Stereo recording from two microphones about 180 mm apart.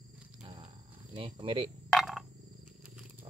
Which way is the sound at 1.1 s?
30° right (ahead or behind).